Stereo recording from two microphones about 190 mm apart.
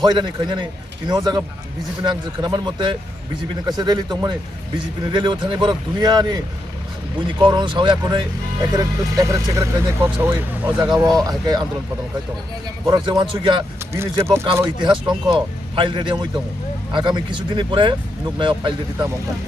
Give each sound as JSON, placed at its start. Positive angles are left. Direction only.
{"t": 0.0, "sound": "a man's voice", "side_deg": -25}
{"t": 7.4, "sound": "a man's voice", "side_deg": -25}
{"t": 11.2, "sound": "a man's voice", "side_deg": -20}
{"t": 12.8, "sound": "a man's voice", "side_deg": -20}
{"t": 13.9, "sound": "a man's voice", "side_deg": -15}